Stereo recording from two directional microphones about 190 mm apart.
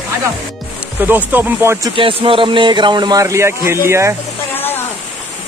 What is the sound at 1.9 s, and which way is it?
Speech, 25° right (ahead or behind).